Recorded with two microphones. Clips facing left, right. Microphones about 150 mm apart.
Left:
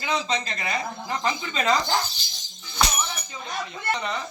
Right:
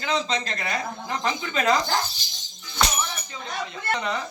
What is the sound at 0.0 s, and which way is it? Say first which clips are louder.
Speech: right 1 dB; 5° left (ahead or behind).